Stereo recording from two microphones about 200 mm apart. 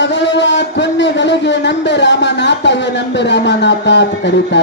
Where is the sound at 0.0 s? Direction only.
60° left (ahead or behind).